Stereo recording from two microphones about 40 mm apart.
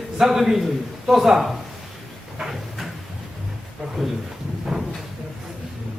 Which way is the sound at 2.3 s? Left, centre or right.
Centre.